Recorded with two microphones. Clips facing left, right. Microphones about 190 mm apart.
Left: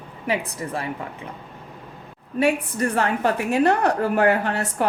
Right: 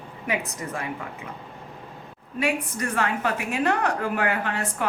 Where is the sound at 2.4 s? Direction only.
35° left (ahead or behind).